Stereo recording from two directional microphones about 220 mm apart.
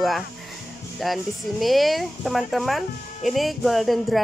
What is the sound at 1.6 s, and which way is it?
Speech, centre (ahead or behind).